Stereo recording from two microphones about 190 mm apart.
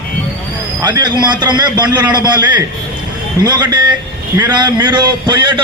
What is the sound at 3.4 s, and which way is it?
A man's voice, 20° right (ahead or behind).